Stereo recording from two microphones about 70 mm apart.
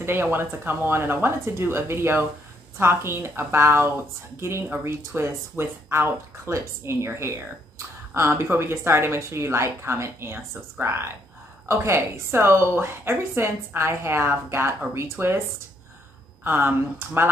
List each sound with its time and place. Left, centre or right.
0.0 s a woman's voice: right
16.4 s a woman's voice: right